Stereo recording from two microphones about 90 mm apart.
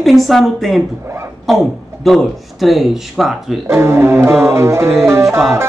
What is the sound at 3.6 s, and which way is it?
Music, 30° right (ahead or behind).